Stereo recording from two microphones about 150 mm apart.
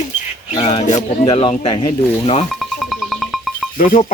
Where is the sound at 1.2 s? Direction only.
35° left (ahead or behind).